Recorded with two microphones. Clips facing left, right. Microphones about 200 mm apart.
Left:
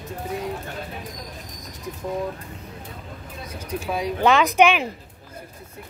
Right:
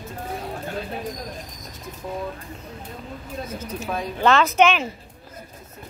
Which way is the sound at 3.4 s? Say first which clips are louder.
Left 3 dB; 15° left (ahead or behind).